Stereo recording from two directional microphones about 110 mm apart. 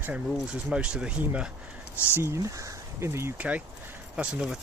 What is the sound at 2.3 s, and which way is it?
Speech, 30° right (ahead or behind).